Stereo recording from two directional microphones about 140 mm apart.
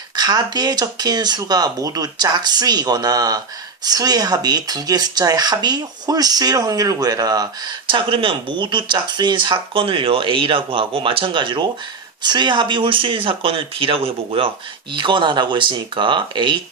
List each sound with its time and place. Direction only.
0.2 s speech: 30° right (ahead or behind)